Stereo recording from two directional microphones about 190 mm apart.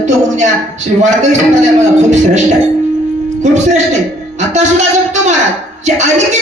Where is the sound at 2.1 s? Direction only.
40° right (ahead or behind).